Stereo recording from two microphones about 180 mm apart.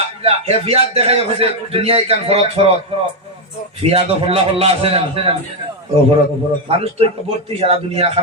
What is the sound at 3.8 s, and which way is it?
A man's voice, 35° right (ahead or behind).